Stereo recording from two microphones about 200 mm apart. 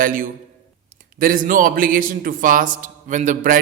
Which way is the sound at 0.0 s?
45° right (ahead or behind).